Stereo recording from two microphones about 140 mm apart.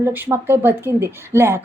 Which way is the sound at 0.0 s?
15° right (ahead or behind).